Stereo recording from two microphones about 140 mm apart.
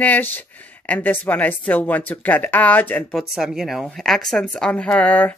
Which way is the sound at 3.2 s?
Centre (ahead or behind).